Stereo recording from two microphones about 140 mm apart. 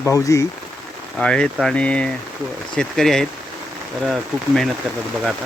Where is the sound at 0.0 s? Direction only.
20° left (ahead or behind).